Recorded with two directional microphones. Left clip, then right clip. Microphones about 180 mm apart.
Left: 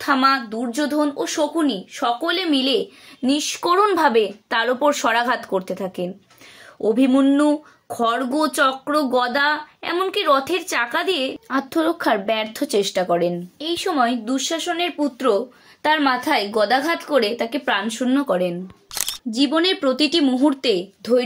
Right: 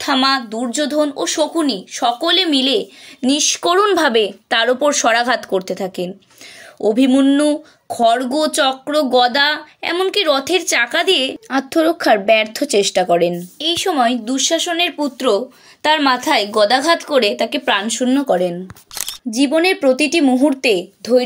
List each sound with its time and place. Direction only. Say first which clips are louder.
0.0 s speech: right 2 dB; 30° right (ahead or behind)